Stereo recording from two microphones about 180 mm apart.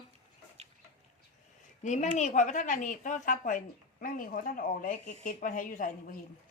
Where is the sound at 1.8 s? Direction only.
40° left (ahead or behind).